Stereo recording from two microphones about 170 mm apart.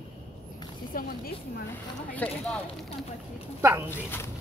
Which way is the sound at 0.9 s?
55° left (ahead or behind).